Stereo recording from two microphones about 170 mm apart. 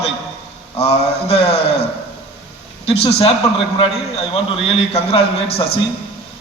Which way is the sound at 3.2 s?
35° left (ahead or behind).